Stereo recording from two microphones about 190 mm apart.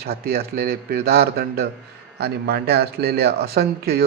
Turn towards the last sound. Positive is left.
turn(degrees=-55)  # may be behind; listen again after turning